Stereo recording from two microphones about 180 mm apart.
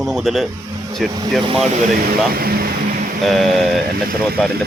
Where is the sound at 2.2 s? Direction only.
55° right (ahead or behind).